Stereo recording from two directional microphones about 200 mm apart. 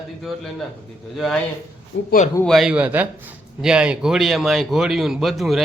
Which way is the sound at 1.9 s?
60° left (ahead or behind).